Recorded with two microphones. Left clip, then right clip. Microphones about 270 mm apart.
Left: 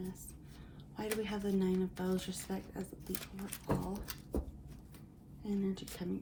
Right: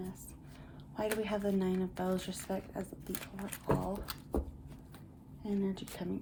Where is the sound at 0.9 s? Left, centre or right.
Right.